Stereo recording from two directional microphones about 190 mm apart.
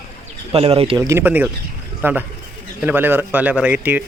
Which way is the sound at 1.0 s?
10° right (ahead or behind).